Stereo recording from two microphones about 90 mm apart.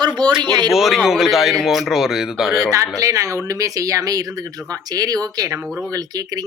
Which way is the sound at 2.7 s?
40° right (ahead or behind).